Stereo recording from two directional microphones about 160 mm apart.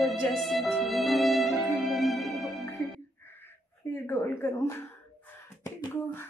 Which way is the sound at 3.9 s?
15° left (ahead or behind).